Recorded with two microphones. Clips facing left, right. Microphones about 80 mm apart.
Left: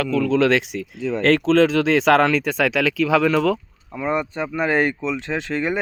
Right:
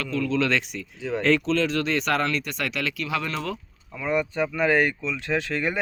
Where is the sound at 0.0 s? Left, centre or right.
Left.